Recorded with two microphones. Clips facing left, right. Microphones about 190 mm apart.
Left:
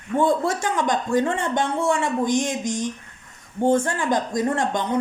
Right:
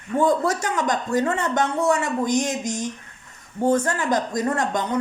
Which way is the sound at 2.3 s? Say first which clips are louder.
Even; 45° right (ahead or behind).